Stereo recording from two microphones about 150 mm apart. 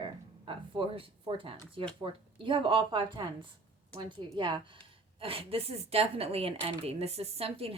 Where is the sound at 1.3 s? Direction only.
40° right (ahead or behind).